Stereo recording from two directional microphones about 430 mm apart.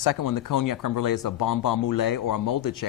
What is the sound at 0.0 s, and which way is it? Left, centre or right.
Speech, left.